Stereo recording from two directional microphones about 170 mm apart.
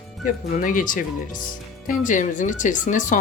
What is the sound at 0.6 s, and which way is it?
Speech, 50° left (ahead or behind).